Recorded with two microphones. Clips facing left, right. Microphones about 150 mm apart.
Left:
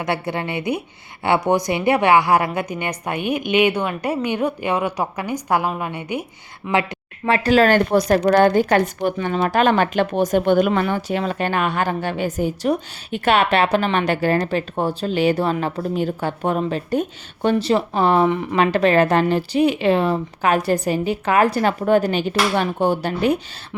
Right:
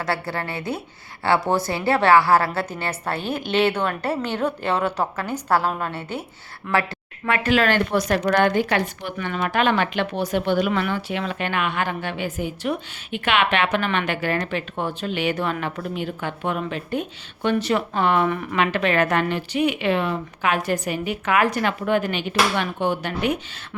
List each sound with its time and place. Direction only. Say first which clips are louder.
0.0 s a woman's voice: left 3 dB; 20° left (ahead or behind)
7.3 s speech: left 5 dB; 35° left (ahead or behind)
9.1 s speech: left 2 dB; 35° left (ahead or behind); by 10.7 s 50° left (ahead or behind)
10.7 s speech: left 4 dB; 35° left (ahead or behind)